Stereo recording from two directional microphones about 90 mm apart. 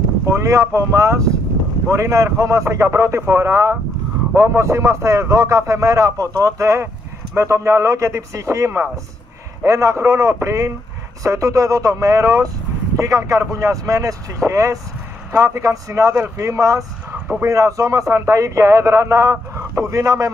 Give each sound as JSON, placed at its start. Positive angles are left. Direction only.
{"t": 0.3, "sound": "speech", "side_deg": -35}